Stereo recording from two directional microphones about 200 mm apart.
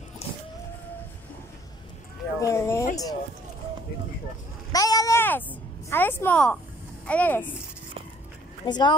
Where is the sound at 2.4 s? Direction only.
15° left (ahead or behind).